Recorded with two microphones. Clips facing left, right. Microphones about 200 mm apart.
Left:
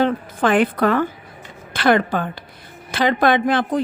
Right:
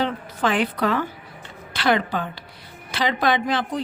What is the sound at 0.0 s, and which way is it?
A woman's voice, 55° left (ahead or behind).